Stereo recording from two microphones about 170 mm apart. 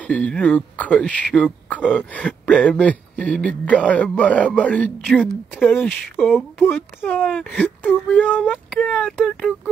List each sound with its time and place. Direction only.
0.0 s speech: 5° left (ahead or behind)